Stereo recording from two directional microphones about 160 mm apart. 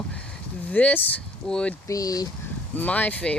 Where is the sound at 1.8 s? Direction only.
20° left (ahead or behind).